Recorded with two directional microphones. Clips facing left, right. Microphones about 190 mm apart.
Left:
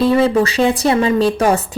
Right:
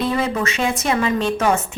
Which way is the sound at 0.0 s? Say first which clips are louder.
Left 8 dB; 30° left (ahead or behind).